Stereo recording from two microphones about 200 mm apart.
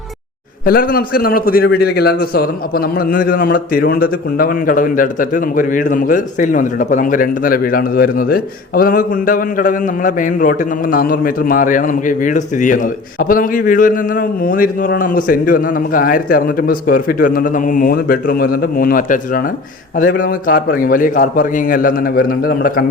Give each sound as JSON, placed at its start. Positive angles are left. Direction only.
{"t": 0.6, "sound": "a man's voice", "side_deg": 45}